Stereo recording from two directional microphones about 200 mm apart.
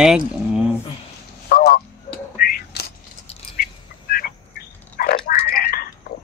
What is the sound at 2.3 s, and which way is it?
Whispering, 50° left (ahead or behind).